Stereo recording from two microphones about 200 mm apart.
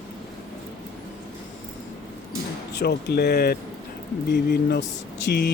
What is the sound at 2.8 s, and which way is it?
Speech, 55° left (ahead or behind).